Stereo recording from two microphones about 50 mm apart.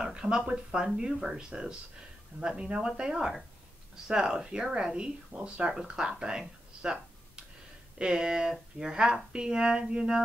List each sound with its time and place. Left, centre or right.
0.0 s speech: centre